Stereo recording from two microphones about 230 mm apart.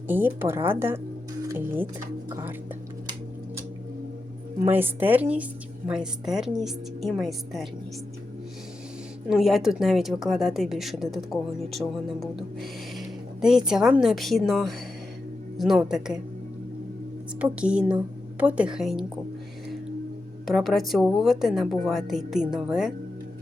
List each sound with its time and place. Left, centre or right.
0.1 s speech: centre
4.6 s speech: centre
9.3 s speech: centre
12.2 s a sound: centre
13.7 s speech: centre
17.4 s speech: centre
20.4 s speech: centre